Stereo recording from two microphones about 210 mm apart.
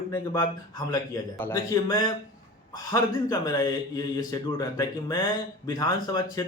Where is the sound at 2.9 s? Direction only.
15° left (ahead or behind).